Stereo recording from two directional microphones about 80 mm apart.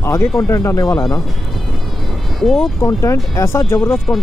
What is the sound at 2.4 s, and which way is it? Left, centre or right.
Speech, centre.